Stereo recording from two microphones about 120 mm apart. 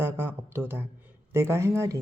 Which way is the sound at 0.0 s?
20° right (ahead or behind).